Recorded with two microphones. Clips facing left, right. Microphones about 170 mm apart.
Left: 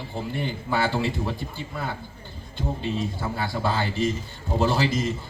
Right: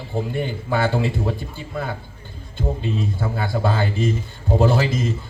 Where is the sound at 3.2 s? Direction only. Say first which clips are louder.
Right 4 dB; 50° right (ahead or behind).